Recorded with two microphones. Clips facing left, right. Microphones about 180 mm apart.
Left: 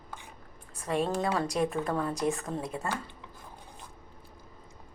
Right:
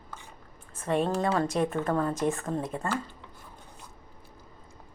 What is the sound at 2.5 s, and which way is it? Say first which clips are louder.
Speech: right 3 dB; 45° right (ahead or behind).